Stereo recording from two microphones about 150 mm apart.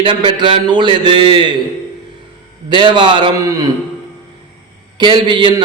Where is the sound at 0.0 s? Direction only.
30° right (ahead or behind).